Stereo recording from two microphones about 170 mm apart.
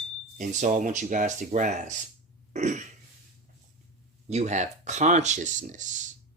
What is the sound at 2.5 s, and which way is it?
Throat clearing, 45° right (ahead or behind).